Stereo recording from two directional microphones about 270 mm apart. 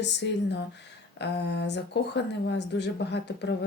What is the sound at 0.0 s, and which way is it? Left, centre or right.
Speech, left.